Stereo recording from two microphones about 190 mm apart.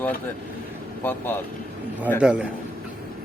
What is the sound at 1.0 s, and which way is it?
Speech, 10° left (ahead or behind).